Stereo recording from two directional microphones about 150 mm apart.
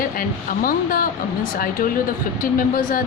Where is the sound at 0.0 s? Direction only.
70° left (ahead or behind).